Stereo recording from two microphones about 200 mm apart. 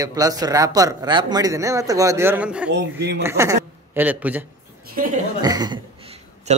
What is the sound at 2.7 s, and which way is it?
Speech, 60° right (ahead or behind).